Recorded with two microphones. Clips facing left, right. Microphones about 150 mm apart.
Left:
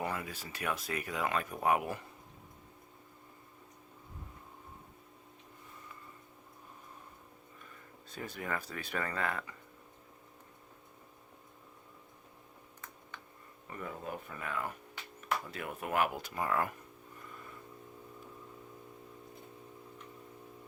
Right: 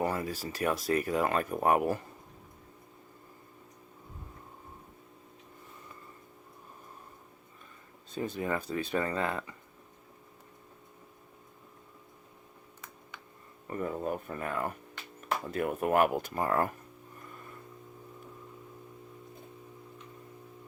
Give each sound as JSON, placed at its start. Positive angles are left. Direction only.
{"t": 0.0, "sound": "speech", "side_deg": -40}
{"t": 8.1, "sound": "speech", "side_deg": -25}
{"t": 13.7, "sound": "speech", "side_deg": -40}